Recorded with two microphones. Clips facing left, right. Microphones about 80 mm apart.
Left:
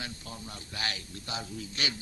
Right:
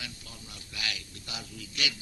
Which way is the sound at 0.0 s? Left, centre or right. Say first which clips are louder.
Left 4 dB; left.